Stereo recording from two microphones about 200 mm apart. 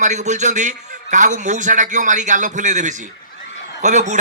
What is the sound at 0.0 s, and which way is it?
A man's voice, 35° right (ahead or behind).